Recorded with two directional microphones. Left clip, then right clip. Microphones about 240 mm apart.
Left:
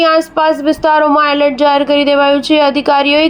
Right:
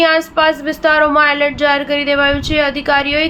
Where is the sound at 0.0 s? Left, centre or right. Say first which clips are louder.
Left 2 dB; left.